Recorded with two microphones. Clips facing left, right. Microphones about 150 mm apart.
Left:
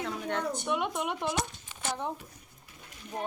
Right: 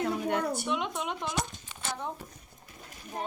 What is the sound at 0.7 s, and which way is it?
Speech, 10° left (ahead or behind).